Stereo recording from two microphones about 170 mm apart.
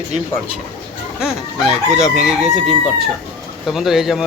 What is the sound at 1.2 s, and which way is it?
Speech, 5° right (ahead or behind).